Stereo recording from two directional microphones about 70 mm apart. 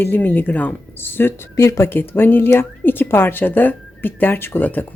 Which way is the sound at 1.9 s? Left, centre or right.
Left.